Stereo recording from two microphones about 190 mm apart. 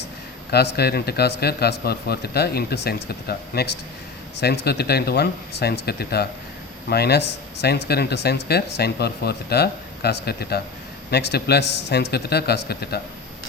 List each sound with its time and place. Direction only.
0.5 s speech: 60° left (ahead or behind)